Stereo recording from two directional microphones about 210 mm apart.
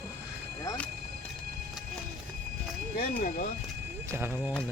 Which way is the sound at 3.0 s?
45° left (ahead or behind).